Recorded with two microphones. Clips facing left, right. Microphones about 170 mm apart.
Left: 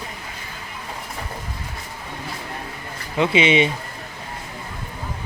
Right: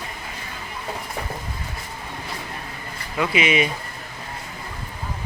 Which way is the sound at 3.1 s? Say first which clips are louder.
Left 4 dB; 25° left (ahead or behind).